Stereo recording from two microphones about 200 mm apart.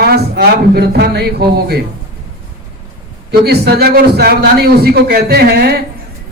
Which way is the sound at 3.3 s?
55° right (ahead or behind).